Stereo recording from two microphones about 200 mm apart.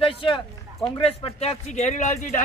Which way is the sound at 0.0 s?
25° left (ahead or behind).